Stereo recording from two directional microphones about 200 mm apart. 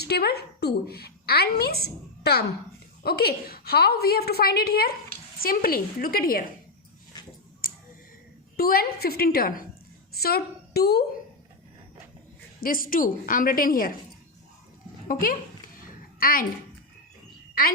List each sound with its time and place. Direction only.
0.0 s a woman's voice: 50° left (ahead or behind)
7.6 s a sound: 45° left (ahead or behind)
8.5 s a woman's voice: 50° left (ahead or behind)
12.5 s a woman's voice: 45° left (ahead or behind)
15.0 s a child's voice: 45° left (ahead or behind)